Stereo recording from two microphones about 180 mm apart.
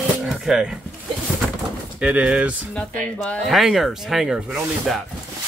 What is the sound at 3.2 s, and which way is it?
Speech, 5° left (ahead or behind).